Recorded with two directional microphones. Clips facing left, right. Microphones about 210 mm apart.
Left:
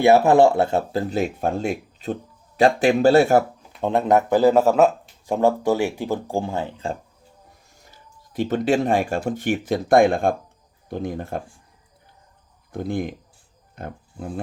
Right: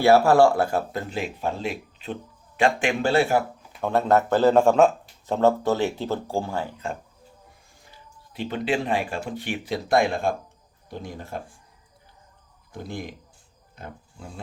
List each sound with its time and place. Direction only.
0.0 s speech: 20° left (ahead or behind)
1.1 s speech: 50° left (ahead or behind)
3.8 s speech: 20° left (ahead or behind)
7.9 s speech: 45° left (ahead or behind)
12.7 s speech: 55° left (ahead or behind)